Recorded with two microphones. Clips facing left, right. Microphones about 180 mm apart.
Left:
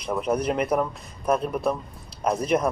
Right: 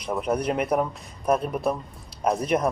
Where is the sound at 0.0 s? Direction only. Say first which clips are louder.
Left 1 dB; centre (ahead or behind).